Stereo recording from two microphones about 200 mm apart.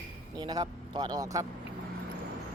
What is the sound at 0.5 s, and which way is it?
Speech, 20° right (ahead or behind).